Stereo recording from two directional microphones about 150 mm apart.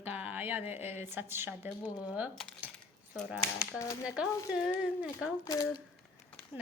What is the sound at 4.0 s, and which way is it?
A woman's voice, 5° right (ahead or behind).